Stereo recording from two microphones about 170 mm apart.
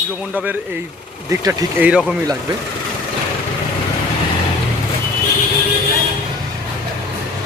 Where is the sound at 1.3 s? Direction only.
15° right (ahead or behind).